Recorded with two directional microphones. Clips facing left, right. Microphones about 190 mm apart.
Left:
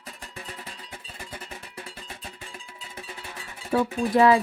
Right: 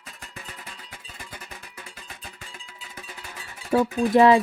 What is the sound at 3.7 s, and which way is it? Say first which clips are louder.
Speech: right 3 dB; 30° right (ahead or behind).